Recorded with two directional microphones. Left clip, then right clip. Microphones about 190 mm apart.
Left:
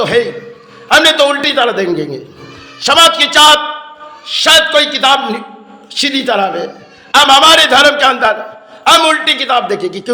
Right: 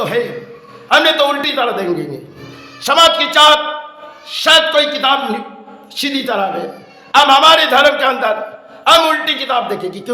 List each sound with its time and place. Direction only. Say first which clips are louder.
0.9 s a man's voice: left 3 dB; 25° left (ahead or behind)